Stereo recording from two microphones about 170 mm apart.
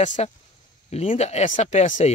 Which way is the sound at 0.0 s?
45° left (ahead or behind).